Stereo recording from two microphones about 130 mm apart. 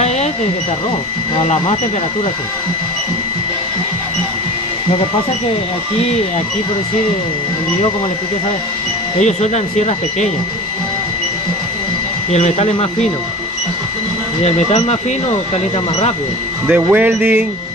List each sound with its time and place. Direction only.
9.2 s speech: 60° left (ahead or behind)
12.3 s speech: 55° left (ahead or behind)
14.4 s speech: 60° left (ahead or behind)
16.6 s speech: 15° right (ahead or behind)